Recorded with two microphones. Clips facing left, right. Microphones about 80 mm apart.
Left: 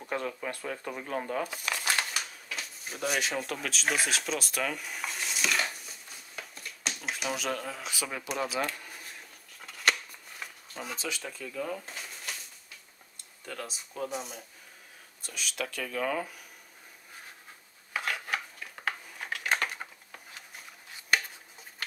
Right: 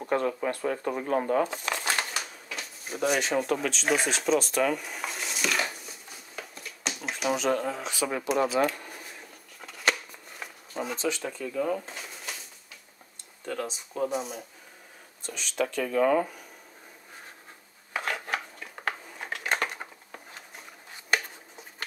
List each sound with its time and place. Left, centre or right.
0.0 s a sound: centre
0.5 s speech: centre
1.4 s speech: right
1.9 s typewriter: centre
7.8 s speech: centre
8.3 s a sound: centre
11.3 s speech: centre
13.5 s speech: centre
15.5 s speech: centre
17.9 s dishes: centre
18.9 s a sound: centre